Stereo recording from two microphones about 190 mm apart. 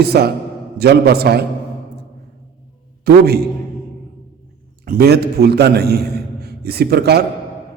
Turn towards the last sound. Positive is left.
turn(degrees=-60)  # may be behind; listen again after turning